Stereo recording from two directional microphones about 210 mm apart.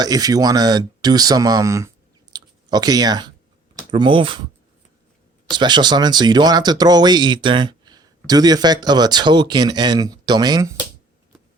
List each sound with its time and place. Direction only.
0.0 s speech: 15° right (ahead or behind)
2.3 s a sound: 20° right (ahead or behind)
3.8 s speech: 20° right (ahead or behind)
5.5 s speech: 20° right (ahead or behind)